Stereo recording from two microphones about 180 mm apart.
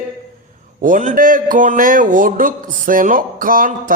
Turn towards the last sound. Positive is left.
turn(degrees=-50)  # may be behind; listen again after turning